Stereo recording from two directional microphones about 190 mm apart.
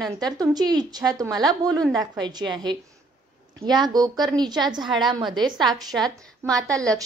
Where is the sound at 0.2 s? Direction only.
20° right (ahead or behind).